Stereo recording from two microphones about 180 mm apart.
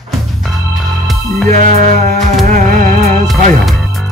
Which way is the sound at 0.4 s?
Centre (ahead or behind).